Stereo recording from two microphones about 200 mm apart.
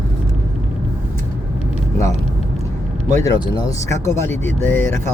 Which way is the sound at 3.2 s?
20° left (ahead or behind).